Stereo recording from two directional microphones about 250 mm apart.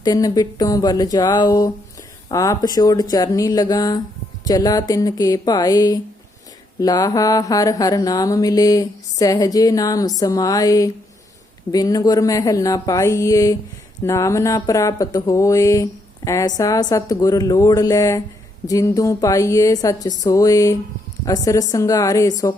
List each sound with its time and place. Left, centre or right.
0.0 s music: centre